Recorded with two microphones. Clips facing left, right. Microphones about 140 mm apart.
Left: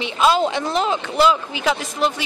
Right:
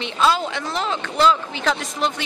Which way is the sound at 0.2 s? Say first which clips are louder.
Left 3 dB; 20° left (ahead or behind).